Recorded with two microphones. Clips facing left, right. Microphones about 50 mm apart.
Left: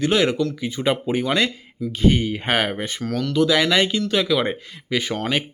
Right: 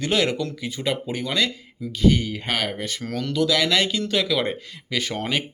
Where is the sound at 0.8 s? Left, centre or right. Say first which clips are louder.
Left 5 dB; left.